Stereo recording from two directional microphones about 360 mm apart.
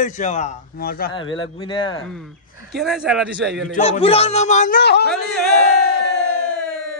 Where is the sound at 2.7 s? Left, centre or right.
Centre.